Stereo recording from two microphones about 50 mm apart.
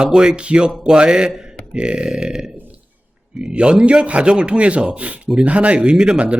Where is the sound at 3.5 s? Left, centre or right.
Right.